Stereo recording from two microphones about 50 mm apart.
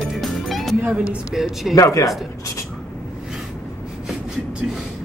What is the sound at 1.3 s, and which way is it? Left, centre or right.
Speech, centre.